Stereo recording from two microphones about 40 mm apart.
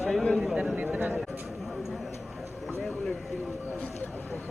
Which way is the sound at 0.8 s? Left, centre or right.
Right.